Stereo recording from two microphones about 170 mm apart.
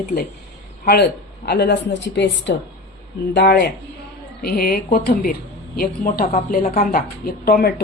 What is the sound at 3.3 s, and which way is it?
A woman's voice, 70° left (ahead or behind).